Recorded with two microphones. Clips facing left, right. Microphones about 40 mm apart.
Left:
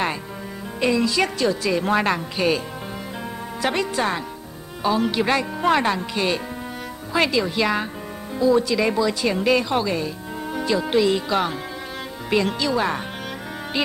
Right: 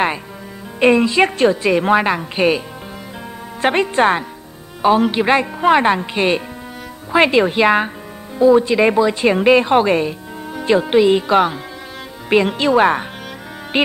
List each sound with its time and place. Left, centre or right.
0.7 s a woman's voice: right
2.0 s speech: centre
3.6 s a woman's voice: right